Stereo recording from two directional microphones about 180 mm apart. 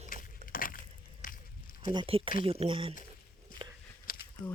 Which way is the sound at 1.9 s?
30° right (ahead or behind).